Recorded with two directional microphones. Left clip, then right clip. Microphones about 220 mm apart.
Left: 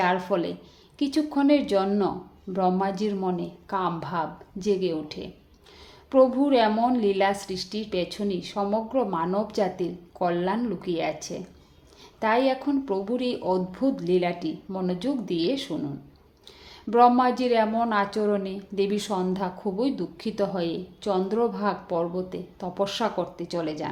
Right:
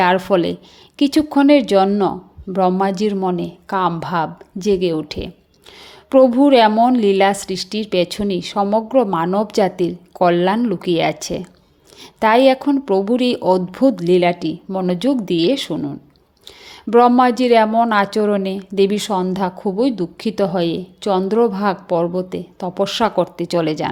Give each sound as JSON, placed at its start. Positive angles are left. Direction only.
{"t": 0.0, "sound": "speech", "side_deg": -35}
{"t": 16.9, "sound": "speech", "side_deg": -35}